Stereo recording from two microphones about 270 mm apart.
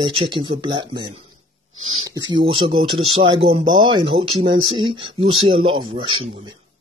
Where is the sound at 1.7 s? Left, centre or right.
Right.